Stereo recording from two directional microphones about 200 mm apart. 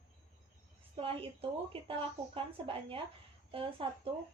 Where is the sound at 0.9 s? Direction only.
25° right (ahead or behind).